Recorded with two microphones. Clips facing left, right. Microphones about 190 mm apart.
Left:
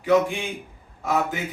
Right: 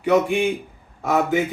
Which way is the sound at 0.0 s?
65° right (ahead or behind).